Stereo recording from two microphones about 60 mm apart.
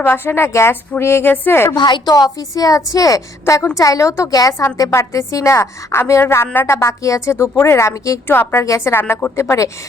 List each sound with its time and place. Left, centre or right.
0.0 s a woman's voice: left
2.0 s a woman's voice: left
3.4 s a woman's voice: left
4.9 s a woman's voice: left
8.5 s a woman's voice: left
8.8 s a woman's voice: left